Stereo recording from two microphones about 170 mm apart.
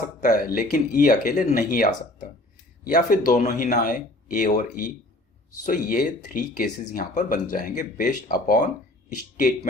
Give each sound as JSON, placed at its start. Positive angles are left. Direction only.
{"t": 0.2, "sound": "speech", "side_deg": 50}